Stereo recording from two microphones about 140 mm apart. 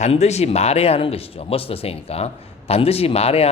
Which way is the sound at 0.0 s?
50° left (ahead or behind).